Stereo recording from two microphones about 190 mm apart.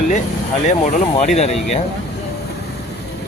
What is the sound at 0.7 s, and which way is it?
Speech, 35° left (ahead or behind).